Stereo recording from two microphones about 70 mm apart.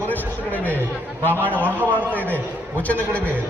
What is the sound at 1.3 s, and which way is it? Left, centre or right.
Speech, right.